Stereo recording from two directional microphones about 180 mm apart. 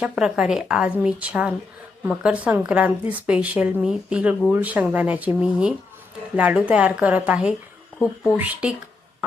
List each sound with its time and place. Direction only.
0.0 s a woman's voice: 5° right (ahead or behind)